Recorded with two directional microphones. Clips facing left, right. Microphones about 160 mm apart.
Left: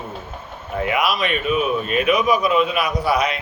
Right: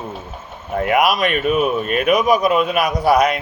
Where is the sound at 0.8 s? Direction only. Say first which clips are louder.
Right 4 dB; 45° right (ahead or behind).